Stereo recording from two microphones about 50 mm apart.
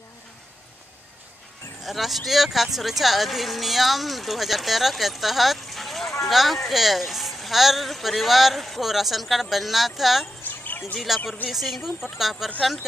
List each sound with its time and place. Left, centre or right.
1.9 s speech: centre
10.6 s a sound: left
11.5 s speech: centre